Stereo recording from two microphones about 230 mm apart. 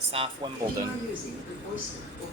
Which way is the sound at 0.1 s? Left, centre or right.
Right.